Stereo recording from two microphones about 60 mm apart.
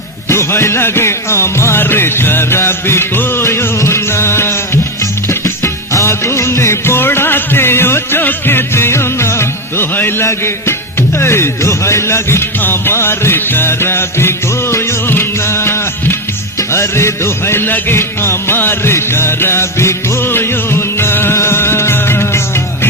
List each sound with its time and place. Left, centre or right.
0.3 s music: left
1.8 s music: left
12.5 s music: left